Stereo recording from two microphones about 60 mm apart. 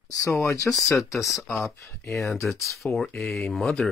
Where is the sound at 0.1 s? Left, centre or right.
Left.